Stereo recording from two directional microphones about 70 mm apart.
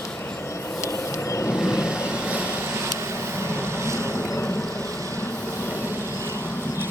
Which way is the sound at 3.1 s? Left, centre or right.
Right.